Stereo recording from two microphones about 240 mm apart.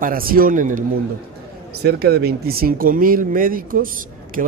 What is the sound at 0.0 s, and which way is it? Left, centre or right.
Speech, right.